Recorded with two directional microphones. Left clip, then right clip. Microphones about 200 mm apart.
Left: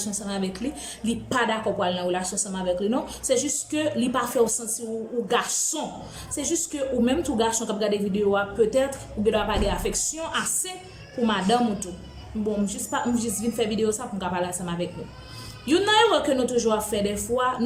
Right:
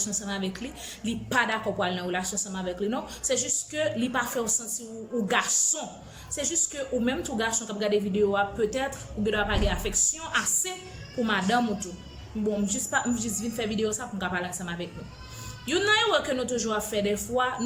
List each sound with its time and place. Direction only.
0.0 s a woman's voice: 20° left (ahead or behind)